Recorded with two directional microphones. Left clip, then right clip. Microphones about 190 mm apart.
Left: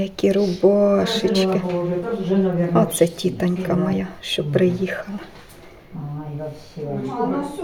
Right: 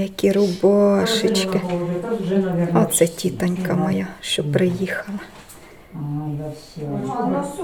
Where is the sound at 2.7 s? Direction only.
5° left (ahead or behind).